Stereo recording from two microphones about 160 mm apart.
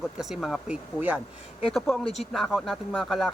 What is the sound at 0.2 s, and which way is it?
Speech, centre (ahead or behind).